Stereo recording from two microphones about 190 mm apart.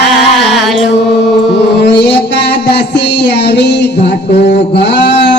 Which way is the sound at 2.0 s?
60° left (ahead or behind).